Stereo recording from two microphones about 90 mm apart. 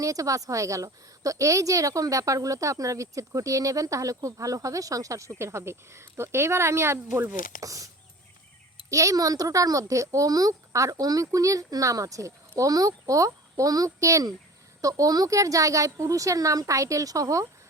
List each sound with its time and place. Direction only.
0.0 s speech: 40° right (ahead or behind); by 7.3 s 25° right (ahead or behind)
7.6 s speech: 40° right (ahead or behind)
8.9 s speech: 35° right (ahead or behind)